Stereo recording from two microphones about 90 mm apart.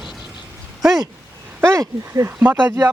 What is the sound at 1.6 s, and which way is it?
Speech, 35° right (ahead or behind).